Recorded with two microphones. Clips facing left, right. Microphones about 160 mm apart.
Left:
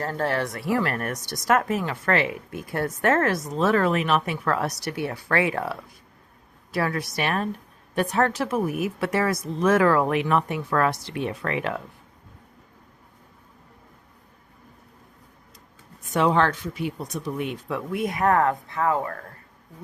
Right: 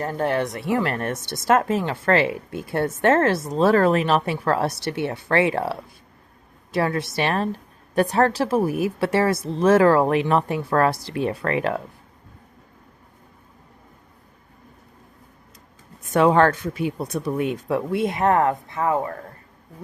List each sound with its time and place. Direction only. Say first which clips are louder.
0.0 s a woman's voice: right 3 dB; 20° right (ahead or behind); by 11.8 s 40° right (ahead or behind)
16.0 s a woman's voice: right 5 dB; 55° right (ahead or behind); by 19.2 s 20° right (ahead or behind)